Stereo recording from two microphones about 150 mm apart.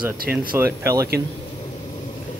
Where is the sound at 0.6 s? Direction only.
20° right (ahead or behind).